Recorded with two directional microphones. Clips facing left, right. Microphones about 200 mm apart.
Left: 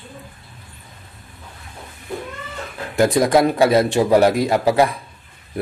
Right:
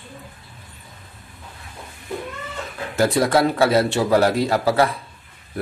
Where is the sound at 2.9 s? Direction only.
15° left (ahead or behind).